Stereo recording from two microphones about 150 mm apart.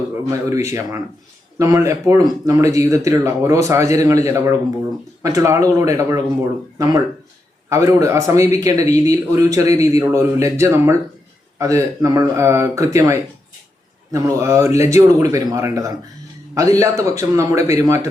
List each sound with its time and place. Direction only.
0.1 s a man's voice: 20° right (ahead or behind)
7.7 s a man's voice: 20° right (ahead or behind)